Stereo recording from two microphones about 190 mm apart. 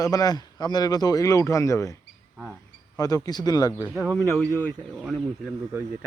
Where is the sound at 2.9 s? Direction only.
20° left (ahead or behind).